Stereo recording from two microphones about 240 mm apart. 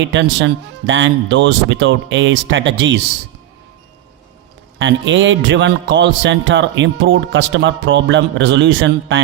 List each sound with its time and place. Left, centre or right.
0.1 s a man's voice: right
4.8 s a man's voice: right